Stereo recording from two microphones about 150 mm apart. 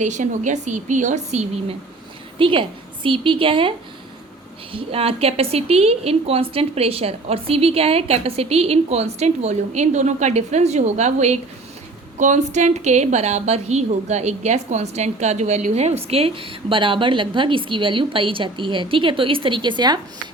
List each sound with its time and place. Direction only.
0.0 s speech: 55° right (ahead or behind)
2.4 s a woman's voice: 35° right (ahead or behind)